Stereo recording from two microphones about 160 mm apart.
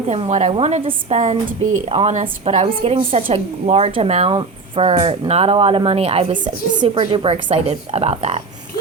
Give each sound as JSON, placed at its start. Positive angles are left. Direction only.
{"t": 0.1, "sound": "a woman's voice", "side_deg": -45}
{"t": 6.7, "sound": "a woman's voice", "side_deg": -25}